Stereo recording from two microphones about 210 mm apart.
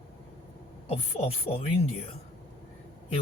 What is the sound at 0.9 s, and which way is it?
Speech, 30° left (ahead or behind).